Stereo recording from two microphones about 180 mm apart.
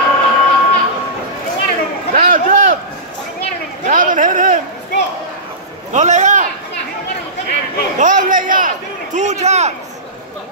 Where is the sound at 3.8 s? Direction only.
50° right (ahead or behind).